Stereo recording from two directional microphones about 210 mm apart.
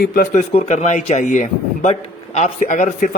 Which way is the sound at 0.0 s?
40° left (ahead or behind).